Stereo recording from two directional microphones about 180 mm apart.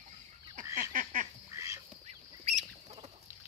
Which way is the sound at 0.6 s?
50° right (ahead or behind).